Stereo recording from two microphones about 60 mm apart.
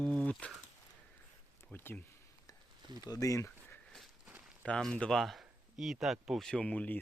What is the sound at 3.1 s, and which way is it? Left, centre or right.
Speech, left.